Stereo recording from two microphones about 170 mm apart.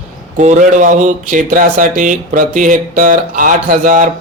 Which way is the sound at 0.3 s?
45° right (ahead or behind).